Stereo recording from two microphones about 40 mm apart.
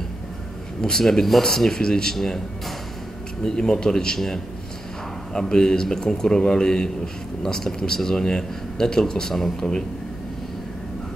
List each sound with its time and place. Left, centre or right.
0.7 s a man's voice: centre
3.4 s a man's voice: centre
5.3 s a man's voice: centre